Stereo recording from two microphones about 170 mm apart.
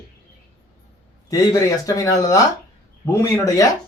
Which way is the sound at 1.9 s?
20° left (ahead or behind).